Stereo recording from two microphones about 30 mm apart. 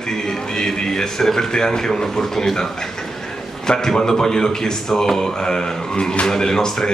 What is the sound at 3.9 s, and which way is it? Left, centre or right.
A man's voice, centre.